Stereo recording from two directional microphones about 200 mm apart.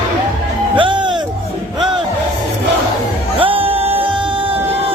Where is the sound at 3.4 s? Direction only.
25° right (ahead or behind).